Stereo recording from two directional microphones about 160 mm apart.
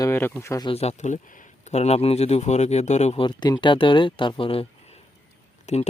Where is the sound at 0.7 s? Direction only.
40° left (ahead or behind).